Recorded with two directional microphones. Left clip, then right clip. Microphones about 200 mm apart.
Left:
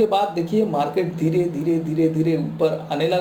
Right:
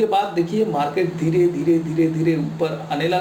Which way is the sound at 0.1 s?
45° left (ahead or behind).